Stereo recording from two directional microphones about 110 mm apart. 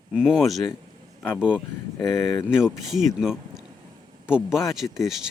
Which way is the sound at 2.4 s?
5° right (ahead or behind).